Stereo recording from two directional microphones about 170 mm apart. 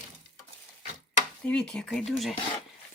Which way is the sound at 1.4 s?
5° left (ahead or behind).